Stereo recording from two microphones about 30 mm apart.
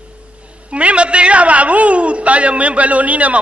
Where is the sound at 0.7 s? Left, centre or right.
Right.